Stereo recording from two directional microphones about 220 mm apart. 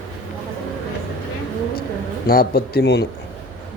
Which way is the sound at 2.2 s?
45° left (ahead or behind).